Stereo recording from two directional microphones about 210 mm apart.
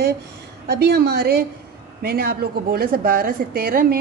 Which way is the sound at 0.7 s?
50° right (ahead or behind).